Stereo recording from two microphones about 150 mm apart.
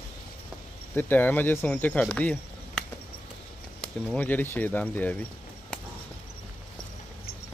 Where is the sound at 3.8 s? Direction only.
5° left (ahead or behind).